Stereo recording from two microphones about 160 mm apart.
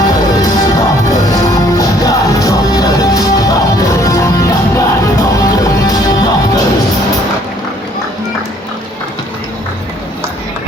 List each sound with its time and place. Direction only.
0.1 s music: 25° left (ahead or behind)